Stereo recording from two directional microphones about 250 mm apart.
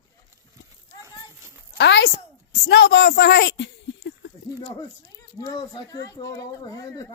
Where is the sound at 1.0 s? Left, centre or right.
Centre.